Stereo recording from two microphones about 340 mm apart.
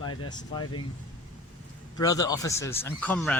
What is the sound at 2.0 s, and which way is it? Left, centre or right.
Speech, centre.